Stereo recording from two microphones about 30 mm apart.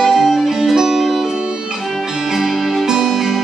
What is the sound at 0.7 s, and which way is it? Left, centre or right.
Music, centre.